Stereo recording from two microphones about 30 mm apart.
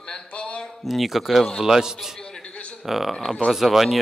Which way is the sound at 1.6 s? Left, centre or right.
Centre.